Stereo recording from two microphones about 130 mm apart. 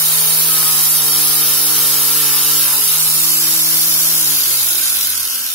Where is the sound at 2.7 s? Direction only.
15° left (ahead or behind).